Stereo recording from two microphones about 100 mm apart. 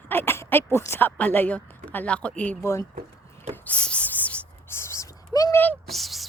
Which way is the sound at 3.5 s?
15° left (ahead or behind).